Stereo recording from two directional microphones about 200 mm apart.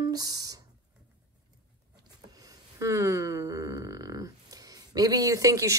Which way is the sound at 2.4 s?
15° right (ahead or behind).